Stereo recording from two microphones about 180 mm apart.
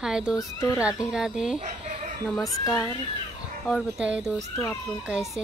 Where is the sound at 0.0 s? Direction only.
5° right (ahead or behind).